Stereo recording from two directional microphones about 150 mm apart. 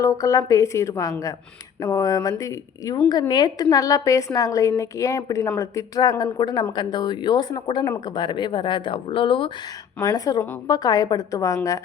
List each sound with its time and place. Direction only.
0.0 s speech: 20° left (ahead or behind)
10.0 s speech: 25° left (ahead or behind)